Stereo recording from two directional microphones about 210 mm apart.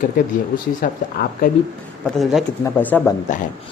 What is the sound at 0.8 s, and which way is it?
Speech, 45° left (ahead or behind).